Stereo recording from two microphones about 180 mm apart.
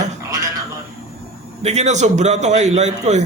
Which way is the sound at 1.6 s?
40° right (ahead or behind).